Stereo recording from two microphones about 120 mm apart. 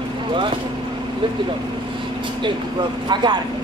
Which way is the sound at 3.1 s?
35° right (ahead or behind).